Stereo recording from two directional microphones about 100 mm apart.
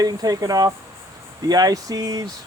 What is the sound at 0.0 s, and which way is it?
Speech, 40° right (ahead or behind).